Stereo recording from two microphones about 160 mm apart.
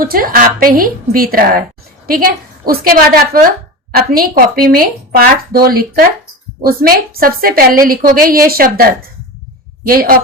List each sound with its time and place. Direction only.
0.0 s a woman's voice: 65° right (ahead or behind)